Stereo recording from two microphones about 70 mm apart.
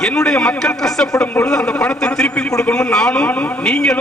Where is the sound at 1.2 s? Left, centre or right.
Left.